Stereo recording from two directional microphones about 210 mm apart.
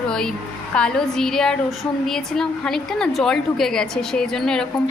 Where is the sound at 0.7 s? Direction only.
5° left (ahead or behind).